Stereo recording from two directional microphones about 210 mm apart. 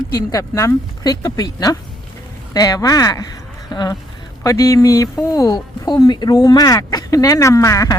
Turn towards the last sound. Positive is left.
turn(degrees=15)  # may be behind; listen again after turning